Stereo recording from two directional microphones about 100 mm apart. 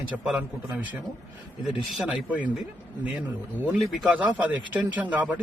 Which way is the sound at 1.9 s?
5° right (ahead or behind).